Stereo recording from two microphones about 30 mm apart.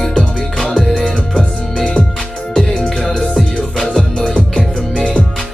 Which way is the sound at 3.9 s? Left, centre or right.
Left.